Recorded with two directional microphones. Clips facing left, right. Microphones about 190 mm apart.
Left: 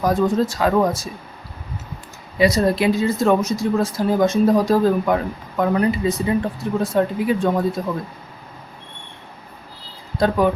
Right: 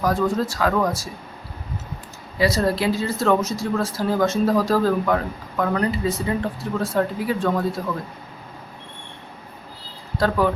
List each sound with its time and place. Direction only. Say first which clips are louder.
0.0 s speech: left 3 dB; 20° left (ahead or behind)
2.4 s speech: left 3 dB; 20° left (ahead or behind)
10.2 s speech: left 3 dB; 20° left (ahead or behind)